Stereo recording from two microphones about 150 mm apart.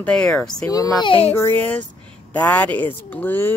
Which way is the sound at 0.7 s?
25° left (ahead or behind).